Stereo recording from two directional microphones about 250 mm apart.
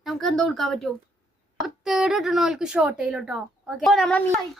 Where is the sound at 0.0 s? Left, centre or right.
Centre.